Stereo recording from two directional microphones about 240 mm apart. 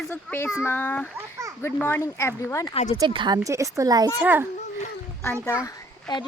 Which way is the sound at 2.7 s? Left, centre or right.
Left.